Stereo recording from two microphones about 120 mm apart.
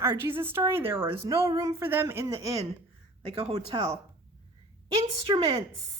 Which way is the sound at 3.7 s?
40° right (ahead or behind).